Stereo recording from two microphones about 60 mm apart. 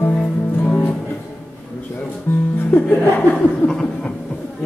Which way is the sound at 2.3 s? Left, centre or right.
Left.